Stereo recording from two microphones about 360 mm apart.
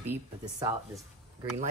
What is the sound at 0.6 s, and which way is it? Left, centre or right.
Speech, centre.